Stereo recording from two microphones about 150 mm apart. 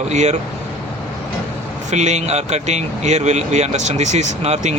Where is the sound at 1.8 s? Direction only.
50° right (ahead or behind).